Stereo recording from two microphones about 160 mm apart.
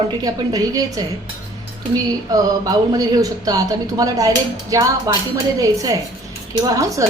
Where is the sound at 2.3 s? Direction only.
25° right (ahead or behind).